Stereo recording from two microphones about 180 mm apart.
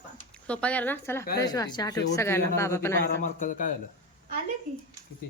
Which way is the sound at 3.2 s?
45° left (ahead or behind).